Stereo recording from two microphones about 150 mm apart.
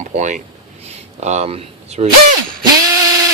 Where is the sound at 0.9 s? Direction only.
50° right (ahead or behind).